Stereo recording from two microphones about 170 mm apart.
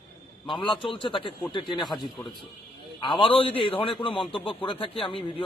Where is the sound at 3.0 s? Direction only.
30° left (ahead or behind).